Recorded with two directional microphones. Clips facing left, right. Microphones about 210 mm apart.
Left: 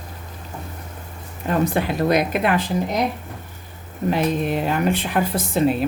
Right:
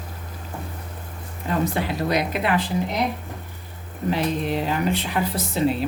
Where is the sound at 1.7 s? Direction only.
50° left (ahead or behind).